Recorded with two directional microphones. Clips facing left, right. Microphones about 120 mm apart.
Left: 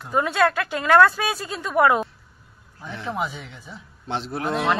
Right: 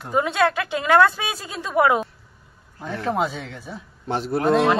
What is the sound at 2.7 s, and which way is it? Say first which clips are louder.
Speech: right 5 dB; 65° right (ahead or behind).